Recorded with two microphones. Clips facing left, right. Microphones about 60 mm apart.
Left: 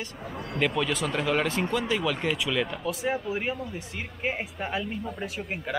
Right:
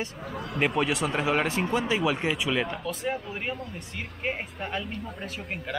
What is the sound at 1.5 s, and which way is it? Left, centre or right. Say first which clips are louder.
Speech: right 1 dB; centre.